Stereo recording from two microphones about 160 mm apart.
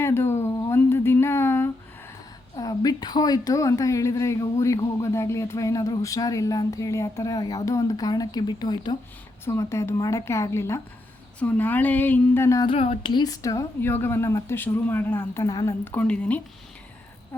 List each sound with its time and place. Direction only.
0.0 s speech: 15° left (ahead or behind)
0.4 s a sound: 20° left (ahead or behind)
2.6 s a woman's voice: 25° left (ahead or behind)
9.4 s a woman's voice: 15° left (ahead or behind)
12.6 s a woman's voice: 35° left (ahead or behind); by 16.4 s 5° left (ahead or behind)